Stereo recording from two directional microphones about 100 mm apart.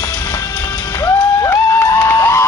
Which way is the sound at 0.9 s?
30° left (ahead or behind).